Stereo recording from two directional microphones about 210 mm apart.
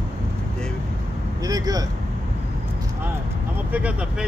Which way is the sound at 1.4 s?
15° right (ahead or behind).